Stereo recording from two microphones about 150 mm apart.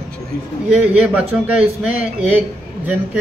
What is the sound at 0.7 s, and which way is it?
A man's voice, 10° right (ahead or behind).